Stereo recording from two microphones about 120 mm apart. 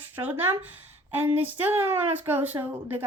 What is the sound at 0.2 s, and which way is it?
Speech, 15° right (ahead or behind).